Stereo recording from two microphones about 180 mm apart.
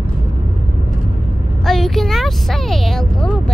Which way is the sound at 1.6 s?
Centre (ahead or behind).